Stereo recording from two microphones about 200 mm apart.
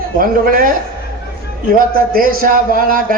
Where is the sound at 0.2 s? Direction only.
45° right (ahead or behind).